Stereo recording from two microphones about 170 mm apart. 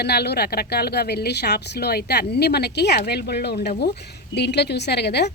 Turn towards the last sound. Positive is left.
turn(degrees=75)  # may be behind; listen again after turning